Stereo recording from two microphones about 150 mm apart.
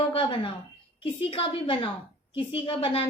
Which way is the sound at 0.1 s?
35° left (ahead or behind).